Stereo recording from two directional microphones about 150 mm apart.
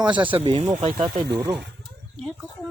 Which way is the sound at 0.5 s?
30° right (ahead or behind).